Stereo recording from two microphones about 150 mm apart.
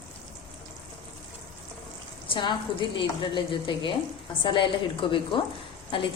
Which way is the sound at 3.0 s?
35° left (ahead or behind).